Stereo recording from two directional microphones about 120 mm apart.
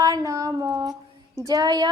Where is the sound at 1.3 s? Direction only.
30° right (ahead or behind).